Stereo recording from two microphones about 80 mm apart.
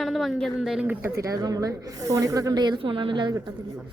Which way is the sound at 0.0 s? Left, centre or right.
Centre.